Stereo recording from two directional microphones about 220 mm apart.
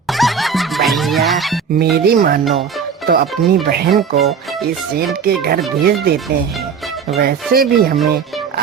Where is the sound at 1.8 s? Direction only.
40° right (ahead or behind).